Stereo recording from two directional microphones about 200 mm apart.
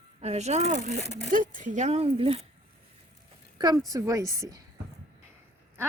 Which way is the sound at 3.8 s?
15° right (ahead or behind).